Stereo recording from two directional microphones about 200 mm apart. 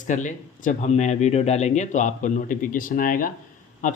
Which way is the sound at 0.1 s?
40° left (ahead or behind).